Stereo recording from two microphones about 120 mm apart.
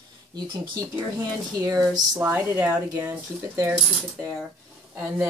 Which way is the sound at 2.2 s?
15° right (ahead or behind).